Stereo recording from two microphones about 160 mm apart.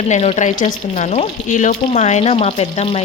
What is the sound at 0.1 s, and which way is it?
Speech, 45° left (ahead or behind).